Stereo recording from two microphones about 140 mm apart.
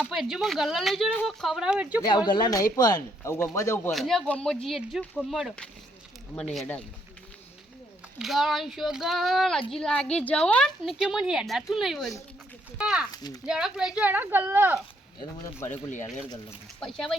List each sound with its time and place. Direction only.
0.0 s speech: 5° right (ahead or behind)
2.0 s speech: 30° left (ahead or behind)
3.9 s speech: centre (ahead or behind)
8.2 s a woman's voice: centre (ahead or behind)
13.1 s speech: 25° left (ahead or behind)
13.4 s speech: 5° right (ahead or behind)
16.8 s speech: centre (ahead or behind)